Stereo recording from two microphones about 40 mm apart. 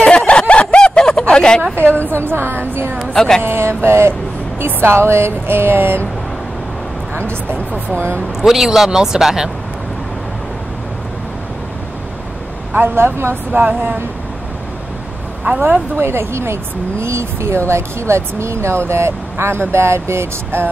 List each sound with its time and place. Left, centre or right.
0.0 s snicker: left
1.2 s a sound: left
1.6 s a woman's voice: right
3.2 s speech: centre
3.4 s a woman's voice: right
7.2 s a woman's voice: left
8.4 s speech: centre
12.7 s a woman's voice: right
13.5 s speech: right
16.0 s speech: right